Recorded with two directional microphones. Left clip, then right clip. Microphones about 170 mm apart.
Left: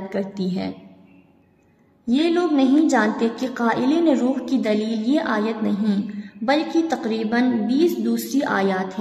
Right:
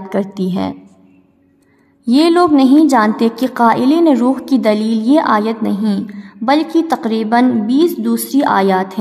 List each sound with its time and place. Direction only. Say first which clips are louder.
0.1 s a woman's voice: right 9 dB; 55° right (ahead or behind)
2.0 s a woman's voice: right 9 dB; 55° right (ahead or behind)